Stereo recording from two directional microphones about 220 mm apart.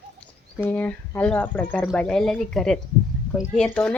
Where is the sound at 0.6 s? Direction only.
10° left (ahead or behind).